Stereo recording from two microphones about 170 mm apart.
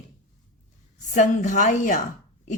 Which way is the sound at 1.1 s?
45° left (ahead or behind).